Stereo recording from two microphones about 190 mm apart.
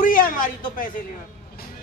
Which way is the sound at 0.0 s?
45° left (ahead or behind).